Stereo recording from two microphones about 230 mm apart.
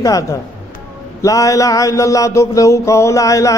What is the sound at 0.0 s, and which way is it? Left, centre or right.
Mantra, centre.